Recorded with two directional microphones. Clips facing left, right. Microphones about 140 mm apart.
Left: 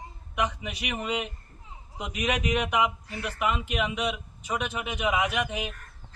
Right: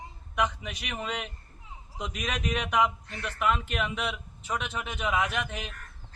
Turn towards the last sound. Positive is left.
turn(degrees=10)  # may be behind; listen again after turning